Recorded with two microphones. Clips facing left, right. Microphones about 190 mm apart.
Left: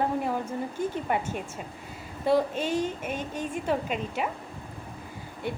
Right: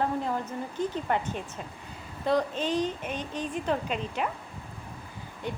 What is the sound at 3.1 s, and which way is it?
Speech, 50° left (ahead or behind).